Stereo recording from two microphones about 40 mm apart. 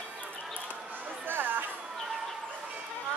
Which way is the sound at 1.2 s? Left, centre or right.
Right.